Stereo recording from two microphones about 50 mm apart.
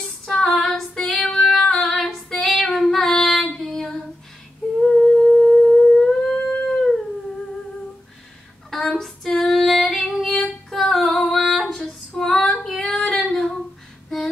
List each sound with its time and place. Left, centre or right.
0.0 s female singing: centre
4.8 s humming: centre
8.6 s fowl: centre
10.1 s female singing: centre